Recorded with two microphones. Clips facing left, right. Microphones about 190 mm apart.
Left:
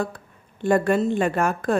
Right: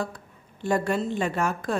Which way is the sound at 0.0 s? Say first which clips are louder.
Left 4 dB; 55° left (ahead or behind).